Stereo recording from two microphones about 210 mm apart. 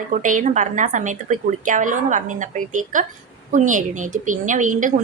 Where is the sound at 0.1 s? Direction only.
40° right (ahead or behind).